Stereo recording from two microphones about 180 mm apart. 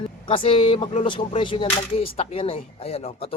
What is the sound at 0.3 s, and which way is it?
Speech, 30° left (ahead or behind).